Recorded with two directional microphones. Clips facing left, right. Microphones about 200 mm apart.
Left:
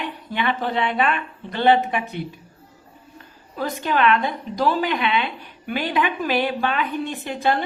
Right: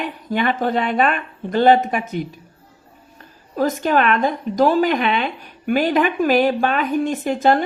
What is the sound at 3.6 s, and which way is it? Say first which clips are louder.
A woman's voice: right 4 dB; 45° right (ahead or behind).